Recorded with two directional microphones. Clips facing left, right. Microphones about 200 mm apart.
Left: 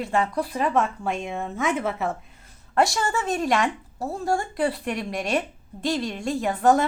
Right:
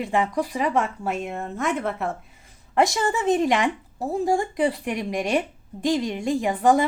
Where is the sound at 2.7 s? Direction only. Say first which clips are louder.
Right 1 dB; 15° right (ahead or behind).